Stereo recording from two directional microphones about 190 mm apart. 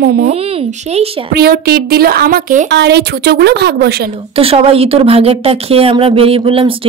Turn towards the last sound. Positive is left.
turn(degrees=-30)  # may be behind; listen again after turning